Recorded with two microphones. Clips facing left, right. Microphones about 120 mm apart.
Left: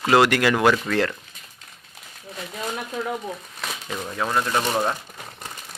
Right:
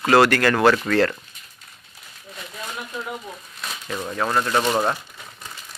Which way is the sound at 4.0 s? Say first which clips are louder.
Right 2 dB; 5° right (ahead or behind).